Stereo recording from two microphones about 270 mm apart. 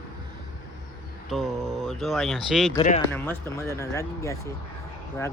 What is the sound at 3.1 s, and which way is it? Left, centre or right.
Speech, centre.